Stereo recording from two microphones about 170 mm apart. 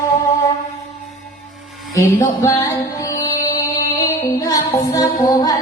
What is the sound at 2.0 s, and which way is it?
Music, 20° left (ahead or behind).